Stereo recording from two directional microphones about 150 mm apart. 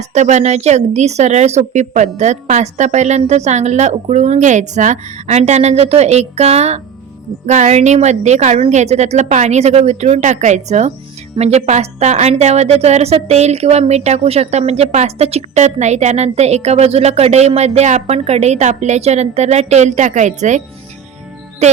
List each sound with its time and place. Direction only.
0.0 s a woman's voice: 50° right (ahead or behind)